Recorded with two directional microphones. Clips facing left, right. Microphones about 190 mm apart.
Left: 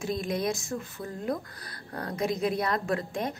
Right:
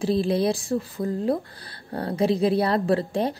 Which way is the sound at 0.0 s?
30° right (ahead or behind).